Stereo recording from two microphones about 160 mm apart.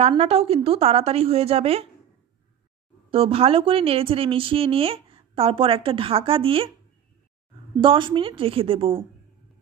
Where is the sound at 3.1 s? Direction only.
35° right (ahead or behind).